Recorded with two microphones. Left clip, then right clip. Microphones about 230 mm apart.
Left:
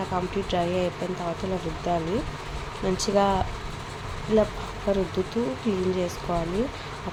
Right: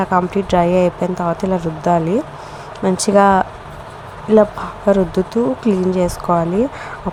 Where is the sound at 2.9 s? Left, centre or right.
Right.